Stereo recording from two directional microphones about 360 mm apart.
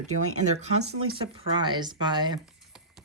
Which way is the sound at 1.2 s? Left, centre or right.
Centre.